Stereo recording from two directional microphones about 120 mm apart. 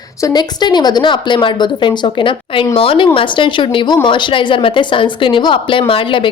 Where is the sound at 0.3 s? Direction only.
35° left (ahead or behind).